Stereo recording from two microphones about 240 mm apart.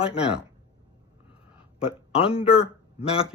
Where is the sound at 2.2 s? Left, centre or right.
Left.